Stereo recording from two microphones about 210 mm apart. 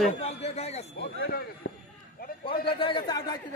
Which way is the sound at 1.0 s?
45° left (ahead or behind).